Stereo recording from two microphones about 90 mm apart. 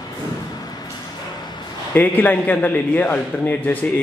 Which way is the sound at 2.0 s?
20° left (ahead or behind).